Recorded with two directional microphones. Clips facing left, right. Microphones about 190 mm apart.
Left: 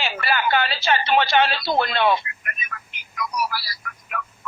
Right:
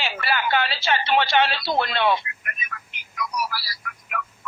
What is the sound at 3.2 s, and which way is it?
Telephone, 50° left (ahead or behind).